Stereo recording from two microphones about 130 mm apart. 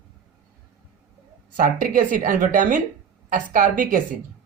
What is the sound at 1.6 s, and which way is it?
A woman's voice, 90° right.